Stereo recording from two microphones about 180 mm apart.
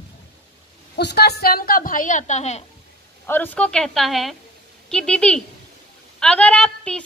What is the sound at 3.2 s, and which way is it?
A woman's voice, 10° left (ahead or behind).